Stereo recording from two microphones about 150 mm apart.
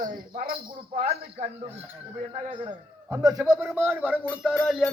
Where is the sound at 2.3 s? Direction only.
35° right (ahead or behind).